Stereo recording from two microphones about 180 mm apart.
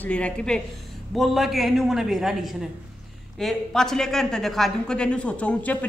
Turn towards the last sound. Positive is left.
turn(degrees=10)  # may be behind; listen again after turning